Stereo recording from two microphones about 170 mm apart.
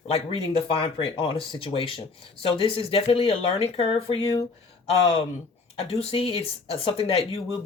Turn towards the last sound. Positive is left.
turn(degrees=35)  # may be behind; listen again after turning